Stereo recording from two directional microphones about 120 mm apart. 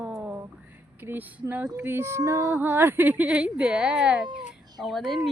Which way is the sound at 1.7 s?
20° right (ahead or behind).